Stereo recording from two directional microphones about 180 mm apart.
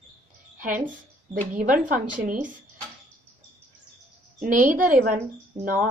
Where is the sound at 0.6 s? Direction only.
45° right (ahead or behind).